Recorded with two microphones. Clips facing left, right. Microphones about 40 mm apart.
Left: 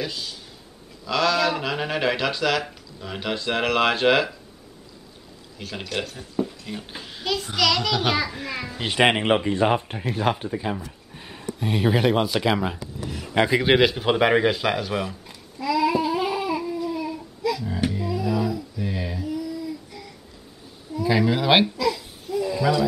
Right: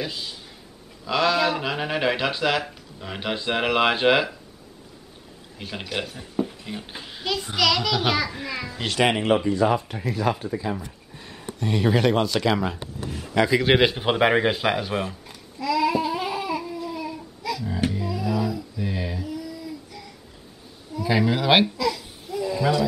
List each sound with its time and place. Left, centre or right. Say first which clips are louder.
0.0 s speech: left 1 dB; centre
5.6 s a child's voice: even; centre
9.0 s speech: left 1 dB; left
11.1 s a sound: left 2 dB; centre
11.6 s speech: even; centre
13.0 s speech: even; left
13.3 s a man's voice: even; left
13.7 s speech: left 1 dB; centre
15.6 s a sound: left 1 dB; centre
21.1 s a child's voice: even; centre
21.7 s a sound: left 1 dB; centre